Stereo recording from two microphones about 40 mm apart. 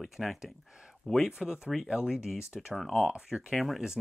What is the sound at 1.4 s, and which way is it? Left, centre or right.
Speech, right.